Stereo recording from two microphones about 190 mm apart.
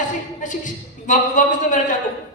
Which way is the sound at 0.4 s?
40° left (ahead or behind).